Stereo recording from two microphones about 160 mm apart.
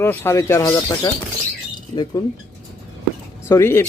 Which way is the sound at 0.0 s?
15° left (ahead or behind).